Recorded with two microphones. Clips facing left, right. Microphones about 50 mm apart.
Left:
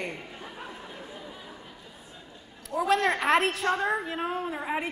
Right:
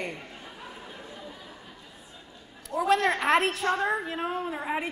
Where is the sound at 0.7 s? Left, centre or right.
Centre.